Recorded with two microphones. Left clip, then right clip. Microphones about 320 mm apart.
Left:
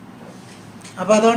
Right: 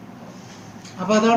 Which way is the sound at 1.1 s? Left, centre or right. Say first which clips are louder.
Left 4 dB; left.